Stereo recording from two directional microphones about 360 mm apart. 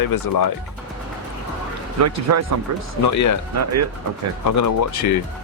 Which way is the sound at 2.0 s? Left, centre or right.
Right.